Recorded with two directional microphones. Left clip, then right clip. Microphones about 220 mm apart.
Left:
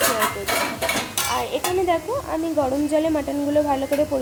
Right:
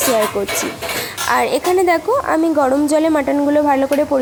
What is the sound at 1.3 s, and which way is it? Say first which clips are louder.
A woman's voice: right 9 dB; 35° right (ahead or behind).